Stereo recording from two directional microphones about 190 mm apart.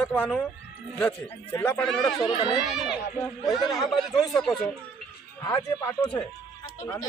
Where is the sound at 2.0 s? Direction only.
25° left (ahead or behind).